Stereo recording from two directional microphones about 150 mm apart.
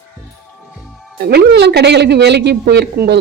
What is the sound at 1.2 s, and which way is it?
Speech, 90° right.